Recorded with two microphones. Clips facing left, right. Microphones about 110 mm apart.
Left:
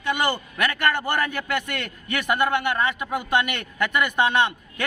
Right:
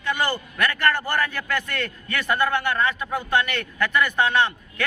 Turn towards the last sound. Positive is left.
turn(degrees=20)  # may be behind; listen again after turning